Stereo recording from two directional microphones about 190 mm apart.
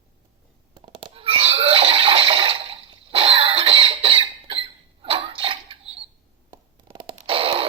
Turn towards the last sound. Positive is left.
turn(degrees=-30)  # may be behind; listen again after turning